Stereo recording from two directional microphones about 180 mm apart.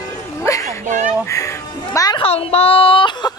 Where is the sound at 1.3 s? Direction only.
15° left (ahead or behind).